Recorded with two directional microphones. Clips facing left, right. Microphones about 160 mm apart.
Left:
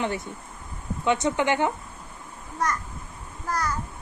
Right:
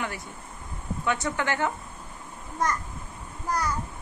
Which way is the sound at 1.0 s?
20° left (ahead or behind).